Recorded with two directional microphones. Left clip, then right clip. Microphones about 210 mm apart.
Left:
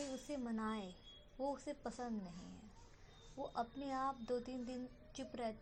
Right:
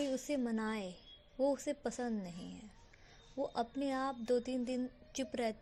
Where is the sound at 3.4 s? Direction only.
50° right (ahead or behind).